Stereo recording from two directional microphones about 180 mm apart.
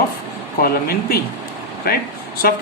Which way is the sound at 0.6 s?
55° left (ahead or behind).